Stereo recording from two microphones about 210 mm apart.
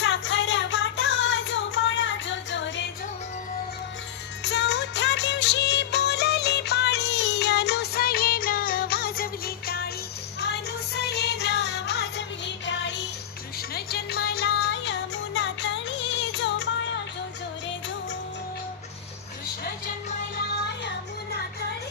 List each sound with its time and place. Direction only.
0.0 s music: 60° left (ahead or behind)
4.4 s music: 55° left (ahead or behind)
13.6 s music: 50° left (ahead or behind)